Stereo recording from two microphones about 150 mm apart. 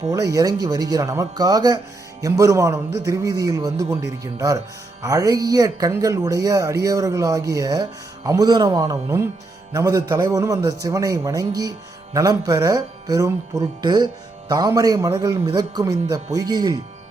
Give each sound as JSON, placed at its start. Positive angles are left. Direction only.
{"t": 0.1, "sound": "a man's voice", "side_deg": -25}